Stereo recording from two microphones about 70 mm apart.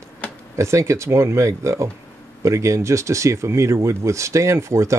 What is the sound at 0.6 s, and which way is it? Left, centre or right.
Speech, right.